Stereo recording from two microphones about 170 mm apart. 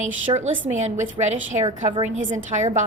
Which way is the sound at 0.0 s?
45° right (ahead or behind).